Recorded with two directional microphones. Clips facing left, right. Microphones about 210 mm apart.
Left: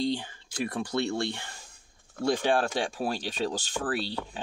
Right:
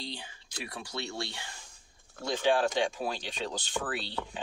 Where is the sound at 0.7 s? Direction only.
55° left (ahead or behind).